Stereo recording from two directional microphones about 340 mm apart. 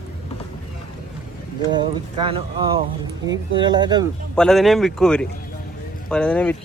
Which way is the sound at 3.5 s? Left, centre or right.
Centre.